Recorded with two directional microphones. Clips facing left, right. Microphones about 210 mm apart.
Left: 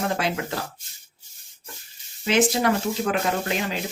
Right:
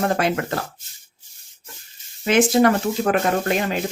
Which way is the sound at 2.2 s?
50° right (ahead or behind).